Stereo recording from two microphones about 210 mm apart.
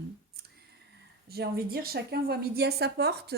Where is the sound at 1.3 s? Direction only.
50° right (ahead or behind).